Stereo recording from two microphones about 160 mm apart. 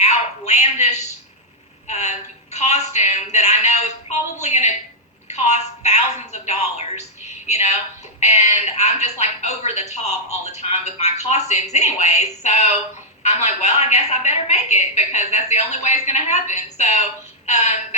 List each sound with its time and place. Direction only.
0.0 s a woman's voice: 45° left (ahead or behind)